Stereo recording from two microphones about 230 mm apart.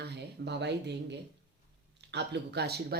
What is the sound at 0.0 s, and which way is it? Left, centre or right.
Speech, right.